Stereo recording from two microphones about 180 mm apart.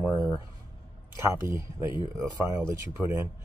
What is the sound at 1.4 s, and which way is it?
Speech, 15° right (ahead or behind).